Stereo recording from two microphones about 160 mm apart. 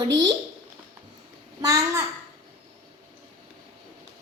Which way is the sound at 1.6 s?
20° right (ahead or behind).